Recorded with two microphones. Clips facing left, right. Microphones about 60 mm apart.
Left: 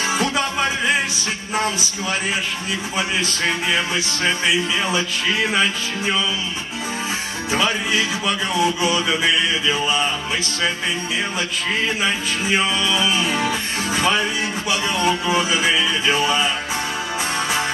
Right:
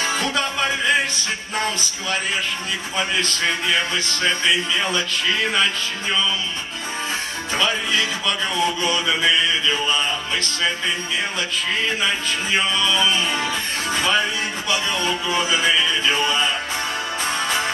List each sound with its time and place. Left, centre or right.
0.0 s music: centre
7.5 s music: centre
12.0 s music: centre